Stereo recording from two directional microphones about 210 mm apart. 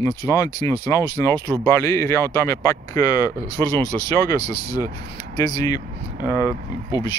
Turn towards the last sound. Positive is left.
turn(degrees=20)  # may be behind; listen again after turning